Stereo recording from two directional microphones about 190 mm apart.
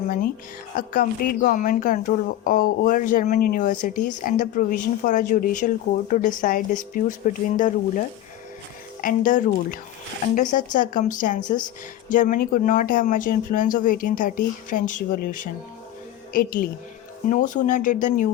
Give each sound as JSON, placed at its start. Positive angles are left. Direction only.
{"t": 0.8, "sound": "a woman's voice", "side_deg": 45}